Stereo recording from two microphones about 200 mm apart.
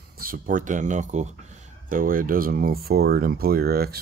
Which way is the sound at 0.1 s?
45° right (ahead or behind).